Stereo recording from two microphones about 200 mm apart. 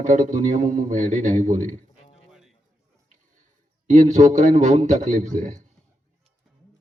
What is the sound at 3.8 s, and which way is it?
A man's voice, 35° right (ahead or behind).